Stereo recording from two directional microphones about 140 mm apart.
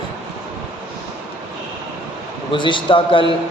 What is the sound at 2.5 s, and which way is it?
Speech, 35° left (ahead or behind).